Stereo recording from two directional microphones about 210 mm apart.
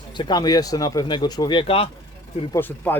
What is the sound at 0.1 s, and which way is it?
Speech, 20° left (ahead or behind).